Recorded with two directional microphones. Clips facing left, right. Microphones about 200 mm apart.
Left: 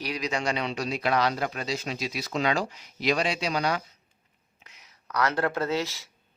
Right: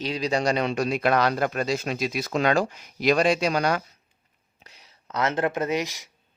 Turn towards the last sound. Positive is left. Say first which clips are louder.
# right 2 dB
turn(degrees=-15)  # may be behind; listen again after turning